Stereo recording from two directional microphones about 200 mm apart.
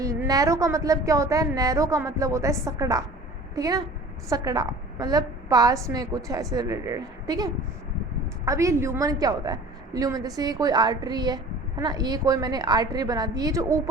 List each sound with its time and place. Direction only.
0.0 s a woman's voice: 15° right (ahead or behind)